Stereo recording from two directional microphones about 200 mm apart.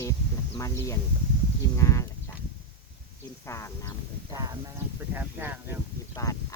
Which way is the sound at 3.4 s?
15° left (ahead or behind).